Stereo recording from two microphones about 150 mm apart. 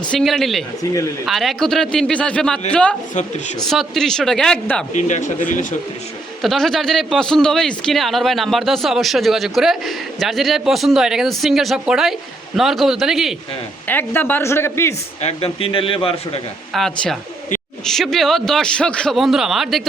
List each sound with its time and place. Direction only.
0.1 s speech: centre (ahead or behind)
4.9 s speech: 55° left (ahead or behind)
6.4 s speech: centre (ahead or behind)
13.8 s speech: 15° left (ahead or behind)
15.2 s speech: 45° left (ahead or behind)
16.7 s speech: centre (ahead or behind)